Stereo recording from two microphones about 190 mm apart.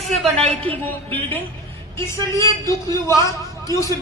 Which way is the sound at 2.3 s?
15° left (ahead or behind).